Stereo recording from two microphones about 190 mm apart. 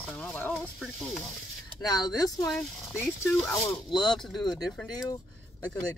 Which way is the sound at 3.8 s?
25° left (ahead or behind).